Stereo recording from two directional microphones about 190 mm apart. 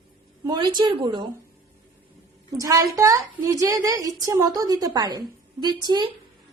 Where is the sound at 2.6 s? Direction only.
20° right (ahead or behind).